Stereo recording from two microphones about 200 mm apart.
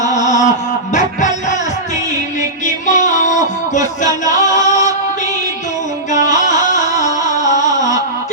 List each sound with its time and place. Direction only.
0.0 s music: 35° left (ahead or behind)
2.6 s music: 40° left (ahead or behind)
6.1 s music: 40° left (ahead or behind)